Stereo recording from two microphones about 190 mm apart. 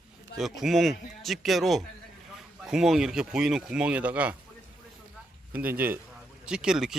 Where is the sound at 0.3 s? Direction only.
Centre (ahead or behind).